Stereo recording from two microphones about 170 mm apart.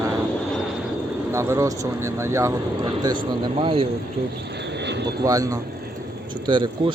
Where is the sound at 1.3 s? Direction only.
15° right (ahead or behind).